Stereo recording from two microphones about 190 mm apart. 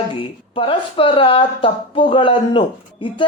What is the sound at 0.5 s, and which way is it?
Speech, 25° left (ahead or behind).